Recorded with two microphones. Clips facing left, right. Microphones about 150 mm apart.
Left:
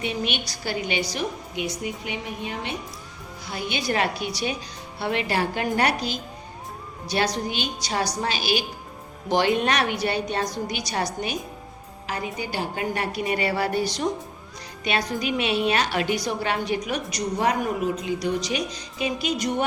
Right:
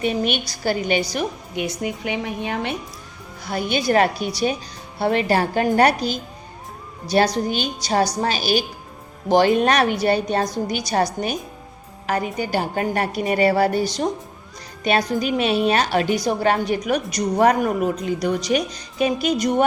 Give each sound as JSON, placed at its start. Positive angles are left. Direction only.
{"t": 0.0, "sound": "a woman's voice", "side_deg": -45}
{"t": 1.8, "sound": "a woman's voice", "side_deg": -70}
{"t": 3.5, "sound": "a woman's voice", "side_deg": -45}